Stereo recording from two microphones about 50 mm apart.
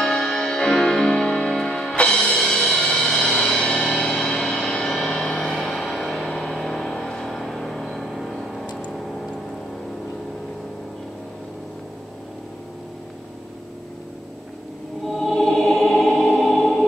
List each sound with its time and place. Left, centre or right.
0.0 s music: centre
6.3 s vehicle: centre
8.9 s a sound: centre
15.1 s music: centre